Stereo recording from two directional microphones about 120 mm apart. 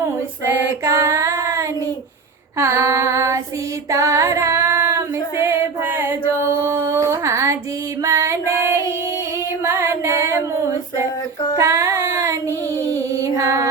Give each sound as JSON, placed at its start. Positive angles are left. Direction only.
{"t": 0.9, "sound": "female singing", "side_deg": -25}
{"t": 11.5, "sound": "child singing", "side_deg": -20}
{"t": 12.9, "sound": "music", "side_deg": -25}